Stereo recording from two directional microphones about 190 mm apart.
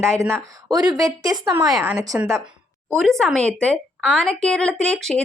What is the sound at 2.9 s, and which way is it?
Speech, centre (ahead or behind).